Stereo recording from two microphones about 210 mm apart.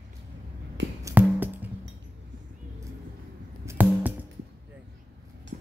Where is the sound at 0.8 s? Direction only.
55° right (ahead or behind).